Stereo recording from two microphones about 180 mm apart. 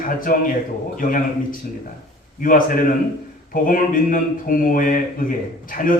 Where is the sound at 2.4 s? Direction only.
50° left (ahead or behind).